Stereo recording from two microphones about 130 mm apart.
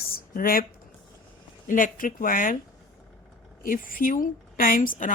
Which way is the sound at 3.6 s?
90° left.